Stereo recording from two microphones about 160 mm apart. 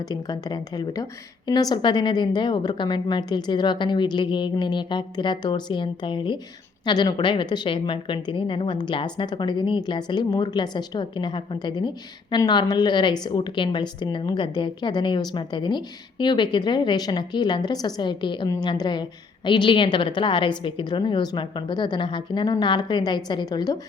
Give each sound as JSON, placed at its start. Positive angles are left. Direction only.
{"t": 0.1, "sound": "a woman's voice", "side_deg": 25}